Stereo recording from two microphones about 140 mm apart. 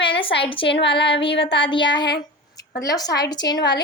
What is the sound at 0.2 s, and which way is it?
A woman's voice, 40° left (ahead or behind).